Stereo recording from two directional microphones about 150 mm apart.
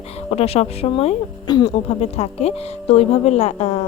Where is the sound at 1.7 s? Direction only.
45° left (ahead or behind).